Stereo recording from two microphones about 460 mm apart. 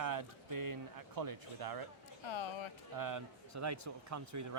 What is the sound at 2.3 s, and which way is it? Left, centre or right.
Speech, left.